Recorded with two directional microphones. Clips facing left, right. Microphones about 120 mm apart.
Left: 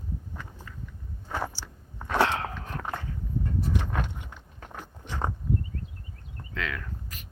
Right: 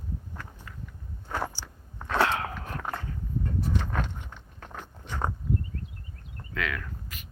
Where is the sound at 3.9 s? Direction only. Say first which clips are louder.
Even; 5° left (ahead or behind).